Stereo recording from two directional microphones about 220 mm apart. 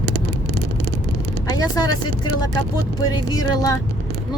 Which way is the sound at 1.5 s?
15° left (ahead or behind).